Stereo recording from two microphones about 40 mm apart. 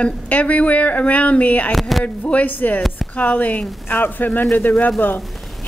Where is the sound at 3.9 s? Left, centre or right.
Left.